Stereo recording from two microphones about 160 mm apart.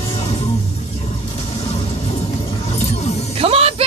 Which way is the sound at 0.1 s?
40° left (ahead or behind).